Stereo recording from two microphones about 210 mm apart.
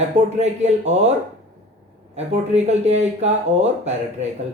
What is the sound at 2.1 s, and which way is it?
Speech, 30° right (ahead or behind).